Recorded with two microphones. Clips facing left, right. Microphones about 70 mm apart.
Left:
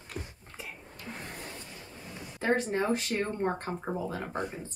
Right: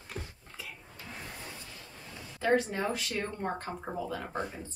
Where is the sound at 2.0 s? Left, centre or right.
Centre.